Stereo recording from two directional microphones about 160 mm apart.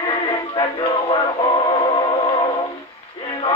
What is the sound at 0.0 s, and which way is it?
Synthetic singing, 35° left (ahead or behind).